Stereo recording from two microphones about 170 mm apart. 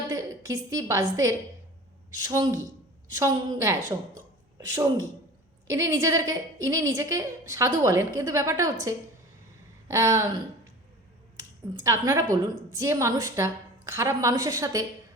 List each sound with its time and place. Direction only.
0.1 s speech: 20° right (ahead or behind)
4.1 s a sound: 20° right (ahead or behind)
5.6 s speech: 20° right (ahead or behind)
11.3 s speech: 20° right (ahead or behind)